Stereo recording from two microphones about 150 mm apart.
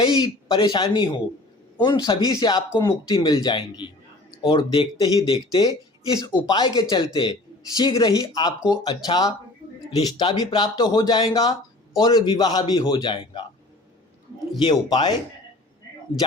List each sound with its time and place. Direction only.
0.0 s a man's voice: 30° left (ahead or behind)
14.6 s a man's voice: 30° left (ahead or behind)